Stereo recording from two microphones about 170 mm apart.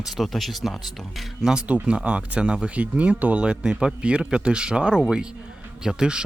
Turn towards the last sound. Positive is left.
turn(degrees=-5)  # may be behind; listen again after turning